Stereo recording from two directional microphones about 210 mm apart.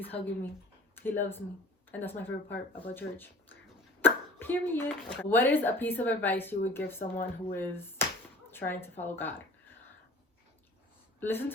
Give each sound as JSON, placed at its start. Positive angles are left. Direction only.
{"t": 1.0, "sound": "speech", "side_deg": 10}
{"t": 7.0, "sound": "speech", "side_deg": 40}
{"t": 7.5, "sound": "speech", "side_deg": 10}
{"t": 11.2, "sound": "speech", "side_deg": 10}